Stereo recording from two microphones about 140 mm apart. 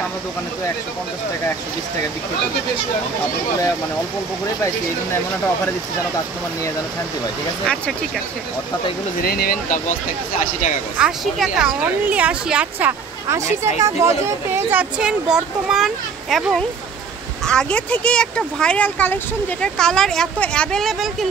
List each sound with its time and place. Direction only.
7.6 s speech: 5° left (ahead or behind)
9.2 s speech: 90° left
11.0 s a woman's voice: 5° right (ahead or behind)